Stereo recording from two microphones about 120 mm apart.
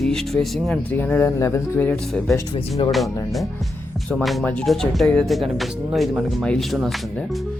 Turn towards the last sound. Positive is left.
turn(degrees=0)  # may be behind; listen again after turning